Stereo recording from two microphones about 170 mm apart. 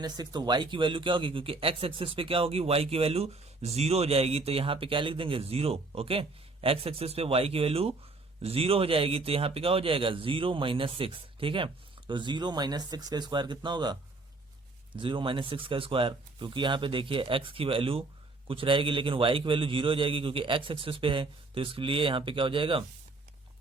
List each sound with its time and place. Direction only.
0.0 s speech: 25° right (ahead or behind)